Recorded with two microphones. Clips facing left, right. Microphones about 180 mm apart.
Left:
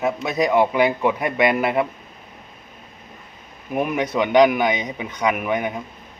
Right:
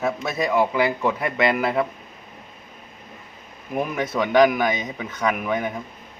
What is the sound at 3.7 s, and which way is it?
A man's voice, 20° left (ahead or behind).